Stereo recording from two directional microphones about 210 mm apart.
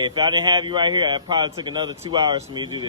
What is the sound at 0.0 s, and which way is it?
A man's voice, 20° right (ahead or behind).